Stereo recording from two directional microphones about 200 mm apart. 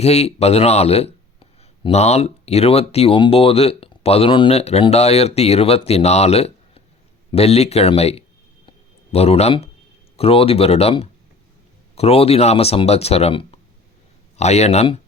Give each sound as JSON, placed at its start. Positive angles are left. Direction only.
{"t": 0.0, "sound": "speech", "side_deg": 30}